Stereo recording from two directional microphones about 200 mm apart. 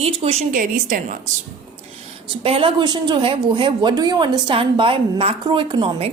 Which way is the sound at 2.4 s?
25° right (ahead or behind).